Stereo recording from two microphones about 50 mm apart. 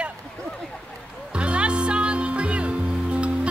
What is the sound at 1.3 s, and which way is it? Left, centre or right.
Music, right.